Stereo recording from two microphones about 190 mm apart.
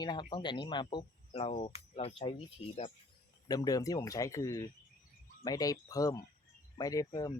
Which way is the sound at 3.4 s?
20° left (ahead or behind).